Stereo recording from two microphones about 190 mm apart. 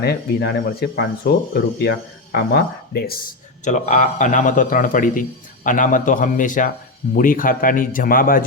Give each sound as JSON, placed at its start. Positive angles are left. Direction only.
{"t": 0.0, "sound": "speech", "side_deg": 55}
{"t": 2.3, "sound": "speech", "side_deg": 55}
{"t": 3.6, "sound": "speech", "side_deg": 40}